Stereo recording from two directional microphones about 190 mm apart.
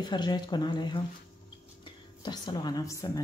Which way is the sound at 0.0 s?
25° left (ahead or behind).